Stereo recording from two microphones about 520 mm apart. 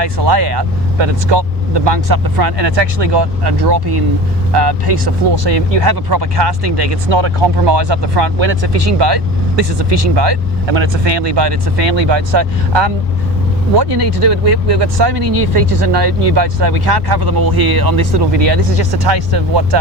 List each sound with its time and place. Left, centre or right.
0.0 s speech: right
10.8 s speech: right